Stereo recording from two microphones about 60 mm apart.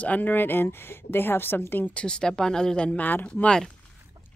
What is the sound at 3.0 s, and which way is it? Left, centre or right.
Speech, left.